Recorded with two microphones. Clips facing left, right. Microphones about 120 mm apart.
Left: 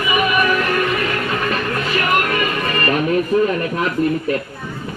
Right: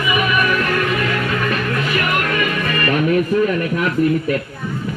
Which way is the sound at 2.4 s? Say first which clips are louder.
Even; 30° left (ahead or behind).